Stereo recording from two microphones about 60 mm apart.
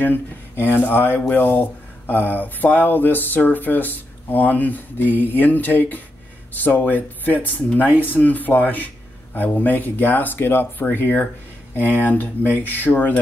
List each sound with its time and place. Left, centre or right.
0.0 s speech: left